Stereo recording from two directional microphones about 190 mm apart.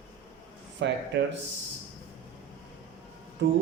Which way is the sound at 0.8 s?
70° right (ahead or behind).